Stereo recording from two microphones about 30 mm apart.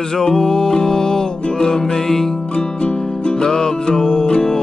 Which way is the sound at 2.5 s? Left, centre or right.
Left.